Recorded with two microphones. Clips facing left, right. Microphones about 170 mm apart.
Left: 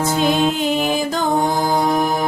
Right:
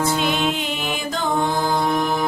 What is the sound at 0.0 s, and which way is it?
Music, 40° left (ahead or behind).